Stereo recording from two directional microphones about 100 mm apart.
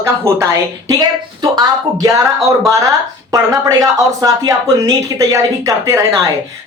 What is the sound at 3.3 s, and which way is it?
Speech, 35° right (ahead or behind).